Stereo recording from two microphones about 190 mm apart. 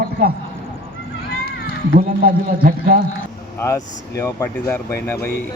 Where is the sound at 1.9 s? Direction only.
50° right (ahead or behind).